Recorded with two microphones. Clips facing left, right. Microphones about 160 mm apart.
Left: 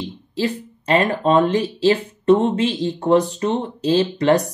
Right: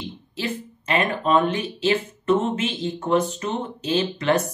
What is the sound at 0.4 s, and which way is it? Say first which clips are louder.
Speech: left 6 dB; 35° left (ahead or behind).